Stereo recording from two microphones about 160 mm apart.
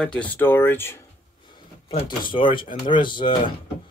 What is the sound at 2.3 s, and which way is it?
Speech, 30° left (ahead or behind).